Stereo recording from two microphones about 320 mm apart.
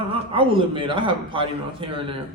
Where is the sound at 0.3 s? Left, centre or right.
Centre.